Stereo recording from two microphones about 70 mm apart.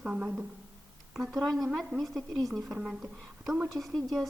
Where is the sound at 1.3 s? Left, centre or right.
Centre.